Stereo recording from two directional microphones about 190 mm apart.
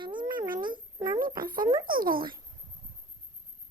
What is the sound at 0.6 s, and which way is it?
Cat, 25° right (ahead or behind).